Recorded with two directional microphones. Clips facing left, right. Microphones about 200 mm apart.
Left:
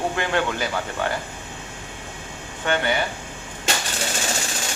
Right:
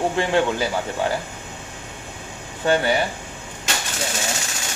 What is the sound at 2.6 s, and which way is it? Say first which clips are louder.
Speech: right 4 dB; 35° right (ahead or behind).